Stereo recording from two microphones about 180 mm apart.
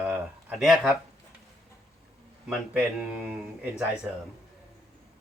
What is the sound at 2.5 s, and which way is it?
Speech, 5° right (ahead or behind).